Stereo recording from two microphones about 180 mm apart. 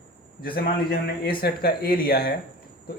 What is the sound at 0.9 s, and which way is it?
Speech, 55° left (ahead or behind).